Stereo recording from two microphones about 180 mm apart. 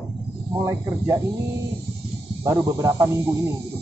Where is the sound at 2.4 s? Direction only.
15° right (ahead or behind).